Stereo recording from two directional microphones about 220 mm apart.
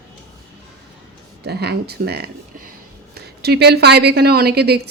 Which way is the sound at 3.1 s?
45° right (ahead or behind).